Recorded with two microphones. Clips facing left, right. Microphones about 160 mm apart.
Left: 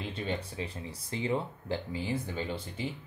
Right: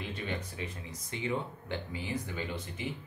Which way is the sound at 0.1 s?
30° left (ahead or behind).